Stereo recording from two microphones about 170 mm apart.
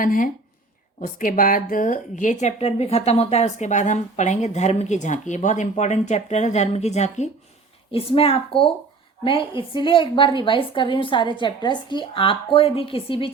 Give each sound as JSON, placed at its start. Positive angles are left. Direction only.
{"t": 0.0, "sound": "a woman's voice", "side_deg": 55}